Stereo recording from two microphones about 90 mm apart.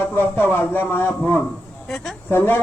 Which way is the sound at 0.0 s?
25° left (ahead or behind).